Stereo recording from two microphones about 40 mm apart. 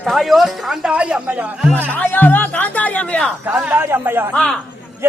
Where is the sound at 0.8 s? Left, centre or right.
Right.